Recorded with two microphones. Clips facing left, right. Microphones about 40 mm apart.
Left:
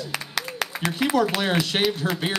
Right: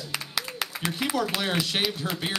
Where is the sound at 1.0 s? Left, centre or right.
Centre.